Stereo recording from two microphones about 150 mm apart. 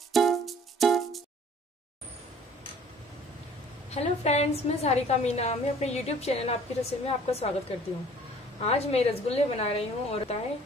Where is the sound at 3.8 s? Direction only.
45° left (ahead or behind).